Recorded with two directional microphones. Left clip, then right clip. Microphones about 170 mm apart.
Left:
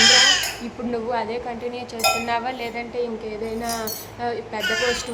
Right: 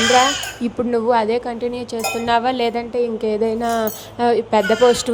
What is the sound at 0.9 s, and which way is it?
Dishes, 35° right (ahead or behind).